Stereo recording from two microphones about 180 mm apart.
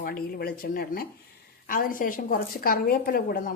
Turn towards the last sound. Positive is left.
turn(degrees=55)  # may be behind; listen again after turning